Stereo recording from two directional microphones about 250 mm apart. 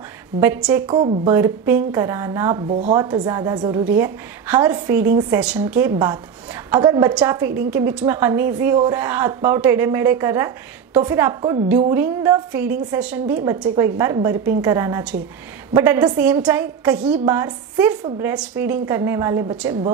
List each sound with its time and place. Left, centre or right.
0.4 s a woman's voice: centre
0.8 s speech: right
1.3 s a woman's voice: centre